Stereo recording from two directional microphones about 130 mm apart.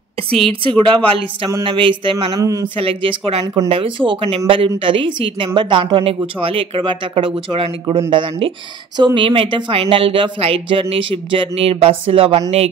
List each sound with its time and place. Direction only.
0.5 s speech: 40° right (ahead or behind)
2.4 s a man's voice: 25° right (ahead or behind)
2.8 s speech: 45° right (ahead or behind)